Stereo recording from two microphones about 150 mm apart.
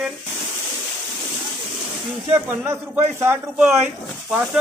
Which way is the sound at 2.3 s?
15° right (ahead or behind).